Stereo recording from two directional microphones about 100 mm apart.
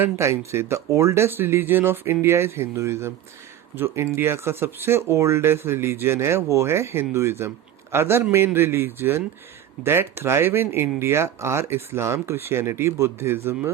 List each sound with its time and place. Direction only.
0.0 s speech: 30° right (ahead or behind)